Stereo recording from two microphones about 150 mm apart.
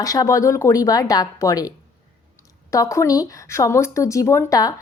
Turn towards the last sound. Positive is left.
turn(degrees=25)  # may be behind; listen again after turning